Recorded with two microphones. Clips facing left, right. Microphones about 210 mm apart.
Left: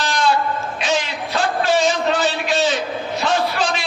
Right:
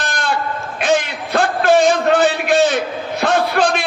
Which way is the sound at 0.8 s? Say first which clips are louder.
Right 7 dB; 55° right (ahead or behind).